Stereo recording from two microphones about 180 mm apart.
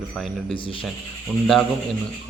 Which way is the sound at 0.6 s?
30° left (ahead or behind).